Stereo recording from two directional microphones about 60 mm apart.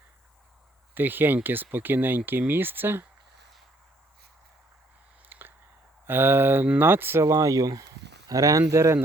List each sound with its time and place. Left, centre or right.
0.9 s speech: right
5.3 s a sound: right
6.1 s speech: right